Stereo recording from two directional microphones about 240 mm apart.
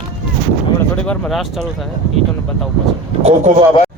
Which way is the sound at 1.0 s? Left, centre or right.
Centre.